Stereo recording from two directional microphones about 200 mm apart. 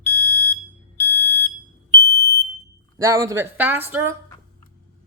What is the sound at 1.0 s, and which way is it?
Alarm, 10° left (ahead or behind).